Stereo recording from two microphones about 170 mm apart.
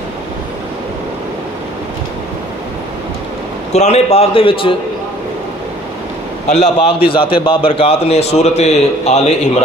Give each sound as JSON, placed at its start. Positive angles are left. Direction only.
{"t": 3.7, "sound": "a man's voice", "side_deg": 40}
{"t": 6.5, "sound": "a man's voice", "side_deg": 35}